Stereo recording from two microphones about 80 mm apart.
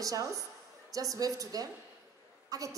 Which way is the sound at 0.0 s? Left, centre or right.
Right.